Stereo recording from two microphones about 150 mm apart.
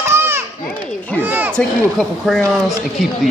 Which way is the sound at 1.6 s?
Centre (ahead or behind).